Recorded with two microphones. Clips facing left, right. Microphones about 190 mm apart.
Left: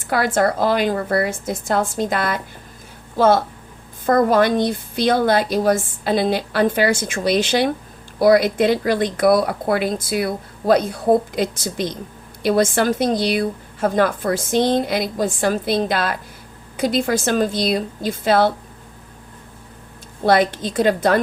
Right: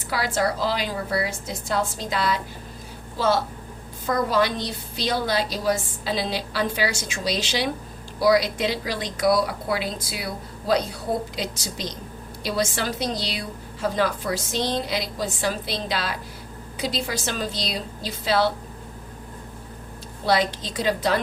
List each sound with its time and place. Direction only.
0.1 s a woman's voice: 50° left (ahead or behind)
20.2 s a woman's voice: 55° left (ahead or behind)